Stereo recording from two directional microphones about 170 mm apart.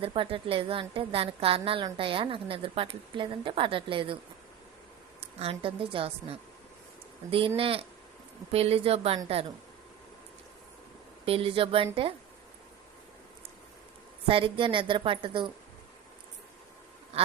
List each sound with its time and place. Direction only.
0.0 s a woman's voice: 30° right (ahead or behind)
5.4 s a woman's voice: 35° right (ahead or behind)
11.3 s a woman's voice: 35° right (ahead or behind)
14.3 s a woman's voice: 30° right (ahead or behind)
17.1 s quack: 35° right (ahead or behind)